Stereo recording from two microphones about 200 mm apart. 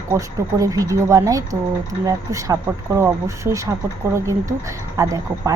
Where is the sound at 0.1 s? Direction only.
15° right (ahead or behind).